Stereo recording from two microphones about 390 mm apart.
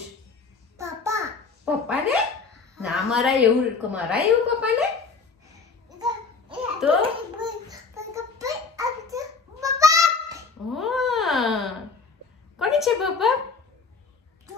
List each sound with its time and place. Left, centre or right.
0.7 s child singing: centre
1.7 s speech: centre
2.7 s a sound: centre
3.9 s a woman's voice: centre
5.9 s babbling: centre
12.5 s a sound: centre